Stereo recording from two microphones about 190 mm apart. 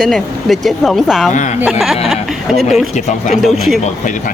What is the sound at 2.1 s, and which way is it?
Speech, centre (ahead or behind).